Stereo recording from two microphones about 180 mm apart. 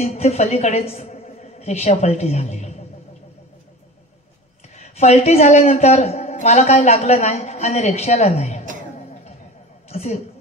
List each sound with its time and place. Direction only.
0.0 s a woman's voice: 35° left (ahead or behind)
4.7 s a woman's voice: 35° left (ahead or behind)
9.8 s a sound: 35° left (ahead or behind)